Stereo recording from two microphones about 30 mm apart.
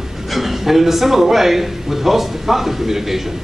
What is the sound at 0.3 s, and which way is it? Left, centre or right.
A man's voice, centre.